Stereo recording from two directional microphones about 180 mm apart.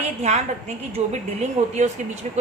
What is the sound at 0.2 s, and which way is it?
A woman's voice, 40° right (ahead or behind).